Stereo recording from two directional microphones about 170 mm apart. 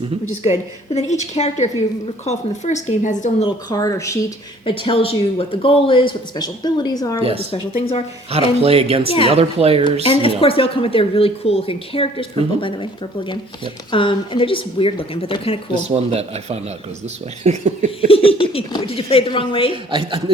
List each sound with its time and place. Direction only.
0.9 s speech: 40° left (ahead or behind)
3.4 s speech: 20° left (ahead or behind)
4.6 s speech: 35° left (ahead or behind)
7.2 s speech: 35° right (ahead or behind)
9.8 s speech: 30° left (ahead or behind)
15.8 s speech: 40° right (ahead or behind)
18.1 s speech: 35° left (ahead or behind)
19.7 s a woman's voice: 30° right (ahead or behind)